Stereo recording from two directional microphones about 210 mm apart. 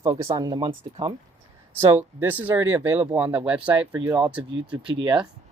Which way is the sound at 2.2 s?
10° right (ahead or behind).